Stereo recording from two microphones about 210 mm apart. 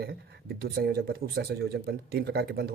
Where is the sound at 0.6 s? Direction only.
50° right (ahead or behind).